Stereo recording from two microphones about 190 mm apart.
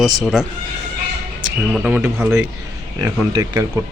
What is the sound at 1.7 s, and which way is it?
Speech, 5° right (ahead or behind).